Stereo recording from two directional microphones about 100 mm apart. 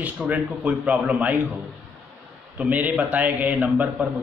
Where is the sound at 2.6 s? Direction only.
15° right (ahead or behind).